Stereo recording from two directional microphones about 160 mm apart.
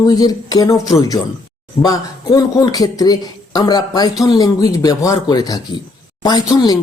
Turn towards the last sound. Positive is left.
turn(degrees=25)  # may be behind; listen again after turning